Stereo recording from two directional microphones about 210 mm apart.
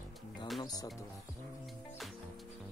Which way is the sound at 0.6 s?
15° left (ahead or behind).